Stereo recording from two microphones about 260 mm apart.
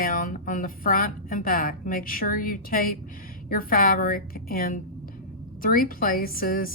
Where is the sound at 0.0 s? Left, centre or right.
Left.